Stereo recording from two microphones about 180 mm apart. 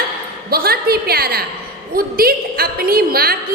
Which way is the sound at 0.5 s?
60° right (ahead or behind).